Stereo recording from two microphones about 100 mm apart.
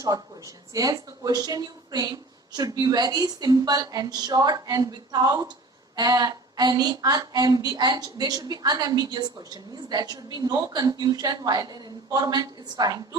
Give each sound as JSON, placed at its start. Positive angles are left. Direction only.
{"t": 0.0, "sound": "a woman's voice", "side_deg": -35}